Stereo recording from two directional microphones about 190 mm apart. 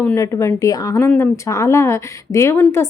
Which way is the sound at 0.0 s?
10° left (ahead or behind).